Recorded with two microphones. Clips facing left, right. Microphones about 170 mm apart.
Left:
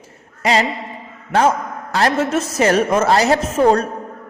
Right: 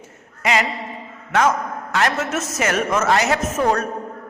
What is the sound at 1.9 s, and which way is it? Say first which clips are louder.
A woman's voice: left 4 dB; 35° left (ahead or behind).